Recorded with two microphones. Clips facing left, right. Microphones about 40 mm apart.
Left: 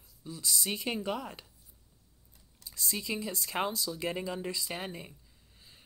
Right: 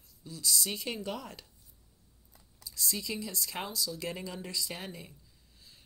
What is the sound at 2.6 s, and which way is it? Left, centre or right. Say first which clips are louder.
Speech: even; left.